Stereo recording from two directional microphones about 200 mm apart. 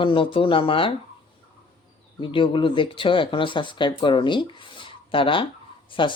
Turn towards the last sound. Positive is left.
turn(degrees=25)  # may be behind; listen again after turning